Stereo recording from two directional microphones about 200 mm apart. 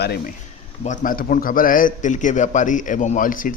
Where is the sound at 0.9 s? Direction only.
45° left (ahead or behind).